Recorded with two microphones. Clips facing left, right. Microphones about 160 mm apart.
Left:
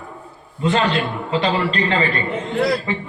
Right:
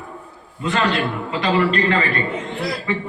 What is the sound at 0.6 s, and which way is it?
A man's voice, 30° left (ahead or behind).